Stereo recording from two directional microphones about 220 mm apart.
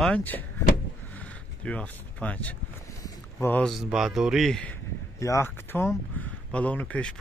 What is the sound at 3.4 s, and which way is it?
Speech, 5° left (ahead or behind).